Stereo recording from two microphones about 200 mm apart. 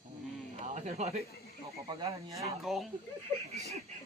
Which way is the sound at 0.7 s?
35° right (ahead or behind).